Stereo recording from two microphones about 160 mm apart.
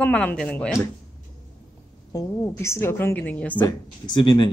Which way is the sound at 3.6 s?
30° left (ahead or behind).